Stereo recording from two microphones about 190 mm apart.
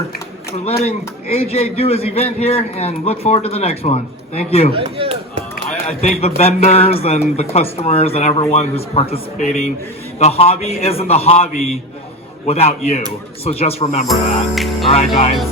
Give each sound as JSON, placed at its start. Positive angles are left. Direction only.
{"t": 0.5, "sound": "a man's voice", "side_deg": 35}
{"t": 4.7, "sound": "speech", "side_deg": -30}
{"t": 6.0, "sound": "a man's voice", "side_deg": 35}
{"t": 14.1, "sound": "music", "side_deg": 0}